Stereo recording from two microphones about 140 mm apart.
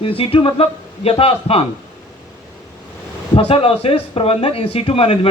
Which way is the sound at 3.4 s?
40° left (ahead or behind).